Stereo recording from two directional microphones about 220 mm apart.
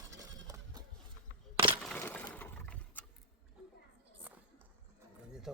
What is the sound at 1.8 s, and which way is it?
Sewing machine, 5° left (ahead or behind).